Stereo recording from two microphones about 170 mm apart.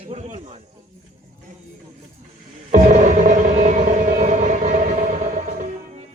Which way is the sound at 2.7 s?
45° right (ahead or behind).